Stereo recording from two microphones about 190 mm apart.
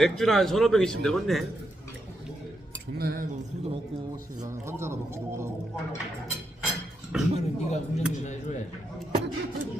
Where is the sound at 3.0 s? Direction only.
50° right (ahead or behind).